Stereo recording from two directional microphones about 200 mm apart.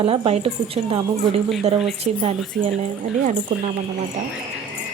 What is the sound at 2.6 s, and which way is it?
Speech, 35° right (ahead or behind).